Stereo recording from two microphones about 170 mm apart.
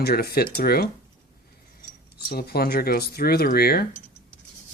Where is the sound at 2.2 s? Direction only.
65° left (ahead or behind).